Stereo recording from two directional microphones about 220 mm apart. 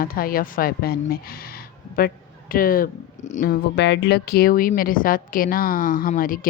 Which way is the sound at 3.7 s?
50° left (ahead or behind).